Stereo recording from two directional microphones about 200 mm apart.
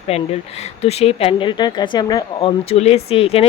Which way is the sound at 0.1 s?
30° left (ahead or behind).